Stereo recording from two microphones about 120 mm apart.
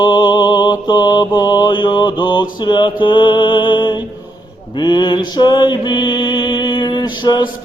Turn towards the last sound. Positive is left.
turn(degrees=40)  # may be behind; listen again after turning